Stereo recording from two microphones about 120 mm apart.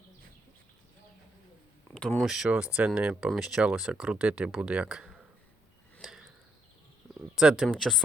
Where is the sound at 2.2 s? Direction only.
5° right (ahead or behind).